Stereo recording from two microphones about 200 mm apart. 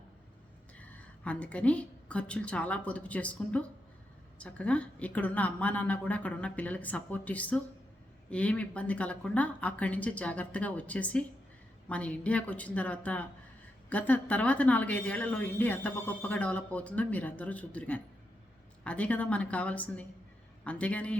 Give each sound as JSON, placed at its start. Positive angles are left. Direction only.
{"t": 0.8, "sound": "a woman's voice", "side_deg": 5}